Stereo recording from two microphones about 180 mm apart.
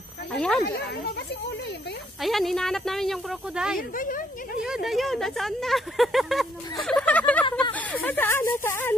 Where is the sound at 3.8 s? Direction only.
50° left (ahead or behind).